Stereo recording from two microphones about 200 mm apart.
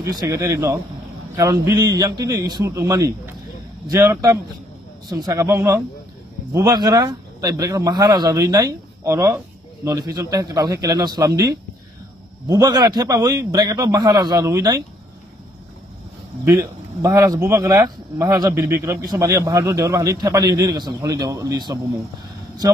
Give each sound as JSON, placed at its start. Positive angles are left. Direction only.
{"t": 0.0, "sound": "a man's voice", "side_deg": -15}
{"t": 16.4, "sound": "speech", "side_deg": -15}